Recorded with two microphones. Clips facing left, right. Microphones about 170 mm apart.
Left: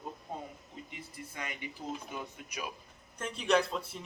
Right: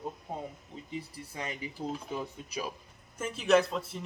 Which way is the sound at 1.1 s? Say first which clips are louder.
Right 3 dB; 30° right (ahead or behind).